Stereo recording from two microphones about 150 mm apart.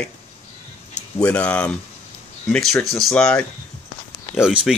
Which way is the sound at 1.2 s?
10° left (ahead or behind).